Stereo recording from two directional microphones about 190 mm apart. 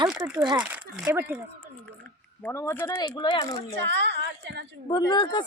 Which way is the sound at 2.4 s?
15° left (ahead or behind).